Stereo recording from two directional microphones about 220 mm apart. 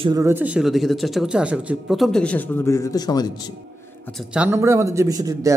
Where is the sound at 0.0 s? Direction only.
15° right (ahead or behind); by 3.3 s 15° left (ahead or behind).